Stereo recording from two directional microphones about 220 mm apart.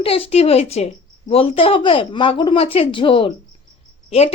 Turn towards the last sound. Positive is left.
turn(degrees=30)  # may be behind; listen again after turning